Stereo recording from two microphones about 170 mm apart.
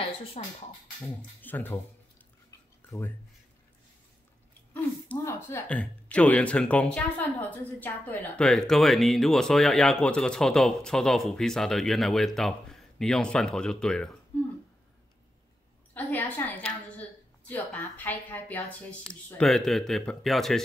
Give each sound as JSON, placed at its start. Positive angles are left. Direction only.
{"t": 0.0, "sound": "speech", "side_deg": 35}
{"t": 1.0, "sound": "a woman's voice", "side_deg": 10}
{"t": 4.7, "sound": "speech", "side_deg": 10}
{"t": 15.9, "sound": "a woman's voice", "side_deg": 10}